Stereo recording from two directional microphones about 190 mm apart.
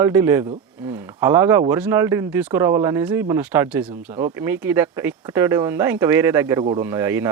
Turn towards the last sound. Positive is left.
turn(degrees=-10)  # may be behind; listen again after turning